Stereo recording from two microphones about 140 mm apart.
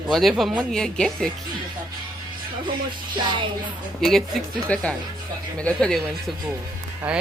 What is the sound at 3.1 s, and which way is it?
Music, 35° right (ahead or behind).